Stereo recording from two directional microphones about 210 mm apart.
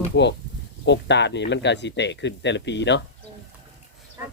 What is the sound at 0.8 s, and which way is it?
Speech, 55° left (ahead or behind).